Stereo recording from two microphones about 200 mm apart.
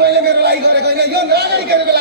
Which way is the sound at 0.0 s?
55° right (ahead or behind).